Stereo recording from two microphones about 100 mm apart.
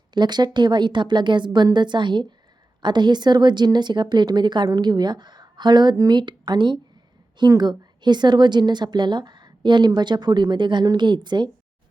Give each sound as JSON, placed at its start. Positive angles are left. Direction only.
{"t": 0.1, "sound": "a woman's voice", "side_deg": -45}